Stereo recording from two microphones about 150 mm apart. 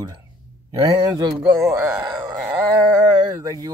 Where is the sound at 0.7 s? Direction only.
30° right (ahead or behind).